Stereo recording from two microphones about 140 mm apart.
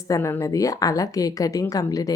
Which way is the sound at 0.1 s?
20° left (ahead or behind).